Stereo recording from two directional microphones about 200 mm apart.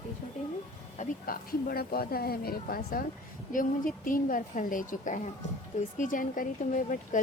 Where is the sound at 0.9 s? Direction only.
40° left (ahead or behind).